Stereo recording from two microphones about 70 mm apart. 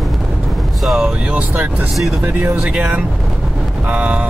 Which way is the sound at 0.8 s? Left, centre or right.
Centre.